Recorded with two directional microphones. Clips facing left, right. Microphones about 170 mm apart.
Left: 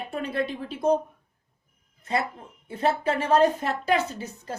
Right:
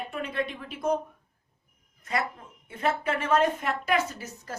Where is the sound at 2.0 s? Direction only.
30° left (ahead or behind).